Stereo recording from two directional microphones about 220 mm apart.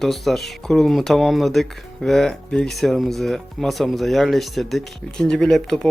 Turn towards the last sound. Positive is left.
turn(degrees=0)  # may be behind; listen again after turning